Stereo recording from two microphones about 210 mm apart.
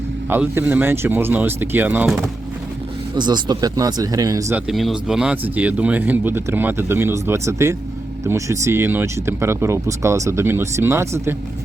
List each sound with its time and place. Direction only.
0.3 s speech: 10° right (ahead or behind)
3.2 s speech: 20° right (ahead or behind)
4.7 s speech: centre (ahead or behind)